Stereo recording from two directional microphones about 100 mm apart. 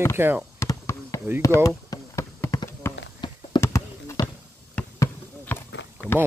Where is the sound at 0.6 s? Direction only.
30° left (ahead or behind).